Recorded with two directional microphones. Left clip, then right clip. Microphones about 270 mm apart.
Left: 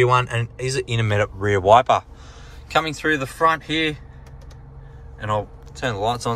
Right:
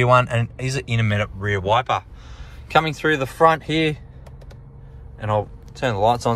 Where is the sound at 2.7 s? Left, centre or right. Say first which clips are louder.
Right 2 dB; centre.